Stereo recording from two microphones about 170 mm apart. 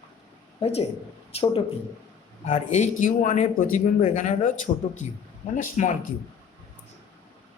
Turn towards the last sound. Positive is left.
turn(degrees=45)  # may be behind; listen again after turning